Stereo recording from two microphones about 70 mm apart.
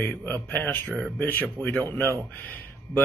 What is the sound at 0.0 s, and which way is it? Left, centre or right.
Speech, left.